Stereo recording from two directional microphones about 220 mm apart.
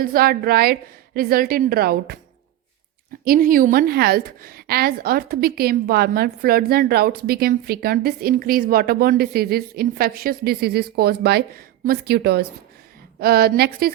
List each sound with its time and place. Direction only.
0.0 s a woman's voice: 40° right (ahead or behind)
3.2 s a woman's voice: 40° right (ahead or behind)